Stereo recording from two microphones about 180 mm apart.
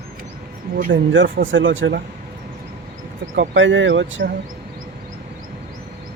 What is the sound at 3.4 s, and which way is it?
Speech, 90° right.